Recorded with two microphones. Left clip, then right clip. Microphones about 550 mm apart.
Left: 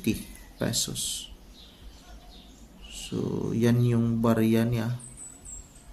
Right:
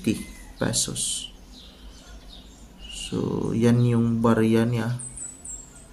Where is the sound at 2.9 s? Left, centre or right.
Left.